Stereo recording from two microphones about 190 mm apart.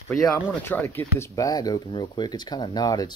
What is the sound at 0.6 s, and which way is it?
Speech, 10° left (ahead or behind).